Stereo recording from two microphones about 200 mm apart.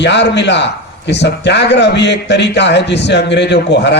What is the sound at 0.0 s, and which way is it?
A man's voice, 60° left (ahead or behind).